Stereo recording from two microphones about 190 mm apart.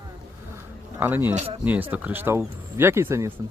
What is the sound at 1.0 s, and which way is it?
Speech, 10° right (ahead or behind).